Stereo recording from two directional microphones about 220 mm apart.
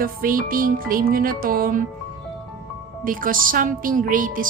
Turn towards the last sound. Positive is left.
turn(degrees=-40)  # may be behind; listen again after turning